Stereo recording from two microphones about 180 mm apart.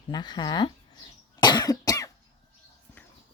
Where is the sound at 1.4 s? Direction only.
25° left (ahead or behind).